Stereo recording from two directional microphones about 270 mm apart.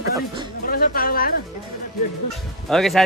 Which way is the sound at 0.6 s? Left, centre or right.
Left.